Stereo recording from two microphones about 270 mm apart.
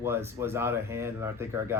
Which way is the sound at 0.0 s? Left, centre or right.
Centre.